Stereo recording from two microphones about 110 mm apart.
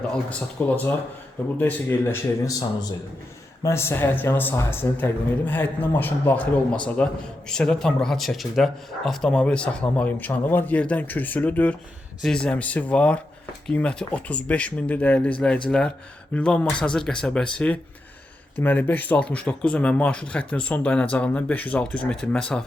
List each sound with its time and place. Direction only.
0.1 s a man's voice: 10° left (ahead or behind)